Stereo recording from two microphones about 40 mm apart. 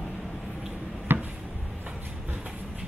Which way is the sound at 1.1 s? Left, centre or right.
Right.